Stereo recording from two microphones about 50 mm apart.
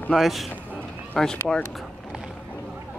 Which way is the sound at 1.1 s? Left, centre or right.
Centre.